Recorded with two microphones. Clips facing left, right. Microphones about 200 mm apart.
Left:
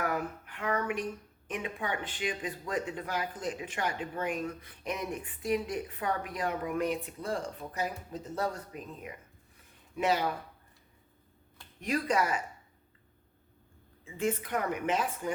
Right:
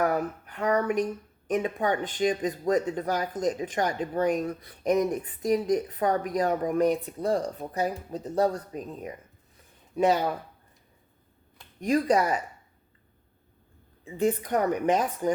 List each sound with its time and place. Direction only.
0.0 s speech: 40° right (ahead or behind)
11.8 s speech: 35° right (ahead or behind)
14.0 s speech: 40° right (ahead or behind)